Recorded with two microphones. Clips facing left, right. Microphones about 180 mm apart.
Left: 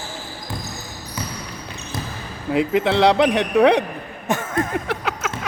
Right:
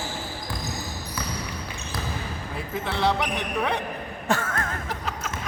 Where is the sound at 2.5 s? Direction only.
85° left.